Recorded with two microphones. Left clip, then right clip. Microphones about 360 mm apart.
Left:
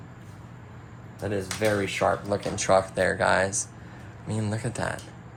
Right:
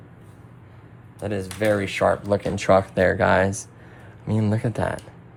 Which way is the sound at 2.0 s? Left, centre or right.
Right.